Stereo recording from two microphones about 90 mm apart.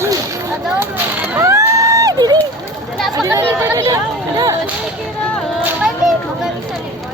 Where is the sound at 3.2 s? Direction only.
30° right (ahead or behind).